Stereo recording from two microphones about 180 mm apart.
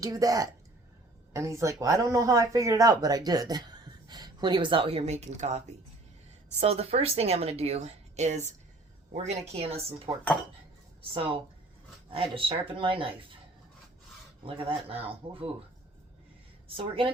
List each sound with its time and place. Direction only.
0.0 s a woman's voice: 20° right (ahead or behind); by 8.4 s 40° right (ahead or behind)
9.5 s a woman's voice: 35° right (ahead or behind)
10.1 s cutlery: 20° right (ahead or behind)
12.1 s speech: 30° right (ahead or behind)
14.4 s a woman's voice: 30° right (ahead or behind)
16.6 s a woman's voice: 30° right (ahead or behind)